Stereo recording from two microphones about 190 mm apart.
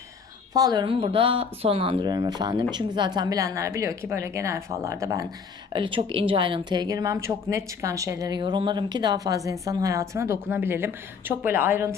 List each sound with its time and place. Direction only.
0.5 s speech: 20° right (ahead or behind)
5.7 s a woman's voice: 25° right (ahead or behind)